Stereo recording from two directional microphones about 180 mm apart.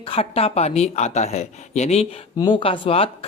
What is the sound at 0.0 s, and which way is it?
Speech, 30° left (ahead or behind).